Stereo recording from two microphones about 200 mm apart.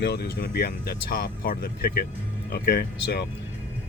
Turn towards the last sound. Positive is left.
turn(degrees=50)  # may be behind; listen again after turning